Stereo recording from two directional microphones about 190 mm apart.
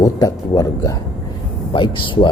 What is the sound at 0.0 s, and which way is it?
Speech, 20° left (ahead or behind).